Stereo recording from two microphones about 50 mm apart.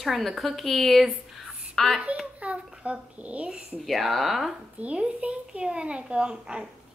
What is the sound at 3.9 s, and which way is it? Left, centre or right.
Speech, centre.